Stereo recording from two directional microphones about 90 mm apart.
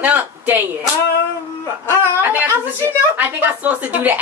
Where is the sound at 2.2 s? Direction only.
20° right (ahead or behind).